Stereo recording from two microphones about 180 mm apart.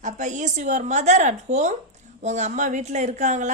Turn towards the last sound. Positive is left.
turn(degrees=-40)  # may be behind; listen again after turning